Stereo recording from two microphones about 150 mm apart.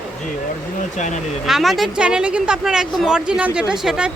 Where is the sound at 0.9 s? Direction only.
55° left (ahead or behind).